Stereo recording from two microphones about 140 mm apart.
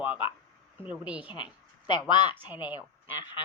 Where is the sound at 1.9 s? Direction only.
30° left (ahead or behind).